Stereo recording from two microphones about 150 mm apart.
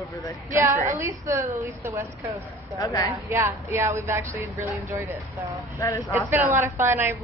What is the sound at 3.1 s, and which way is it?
A woman's voice, 20° right (ahead or behind).